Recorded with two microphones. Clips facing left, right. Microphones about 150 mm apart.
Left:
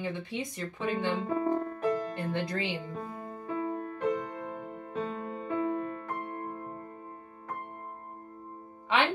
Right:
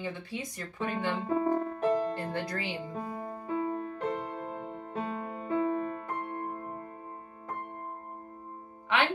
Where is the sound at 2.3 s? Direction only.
20° left (ahead or behind).